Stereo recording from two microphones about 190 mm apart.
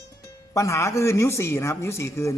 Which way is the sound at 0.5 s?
15° left (ahead or behind).